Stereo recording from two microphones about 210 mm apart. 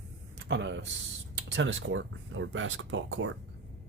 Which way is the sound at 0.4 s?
60° right (ahead or behind).